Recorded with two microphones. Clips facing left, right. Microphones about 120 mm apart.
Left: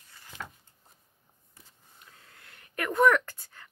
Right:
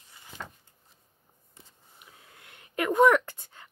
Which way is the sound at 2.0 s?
15° right (ahead or behind).